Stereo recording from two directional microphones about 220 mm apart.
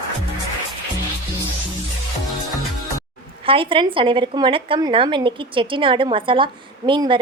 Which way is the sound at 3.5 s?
25° right (ahead or behind).